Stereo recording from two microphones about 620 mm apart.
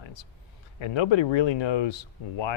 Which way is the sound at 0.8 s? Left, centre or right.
Left.